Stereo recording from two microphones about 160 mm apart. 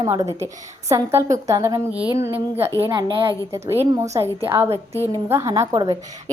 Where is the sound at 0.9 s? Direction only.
15° right (ahead or behind).